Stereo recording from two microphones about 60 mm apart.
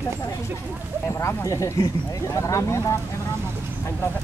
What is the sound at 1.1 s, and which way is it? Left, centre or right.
Speech, left.